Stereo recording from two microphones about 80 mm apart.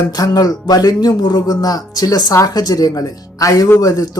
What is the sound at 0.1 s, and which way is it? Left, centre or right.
Speech, left.